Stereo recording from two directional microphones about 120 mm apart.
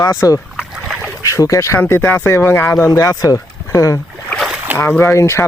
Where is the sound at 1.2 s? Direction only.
25° left (ahead or behind).